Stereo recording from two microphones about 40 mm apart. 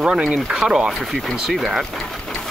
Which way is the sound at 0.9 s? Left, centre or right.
Centre.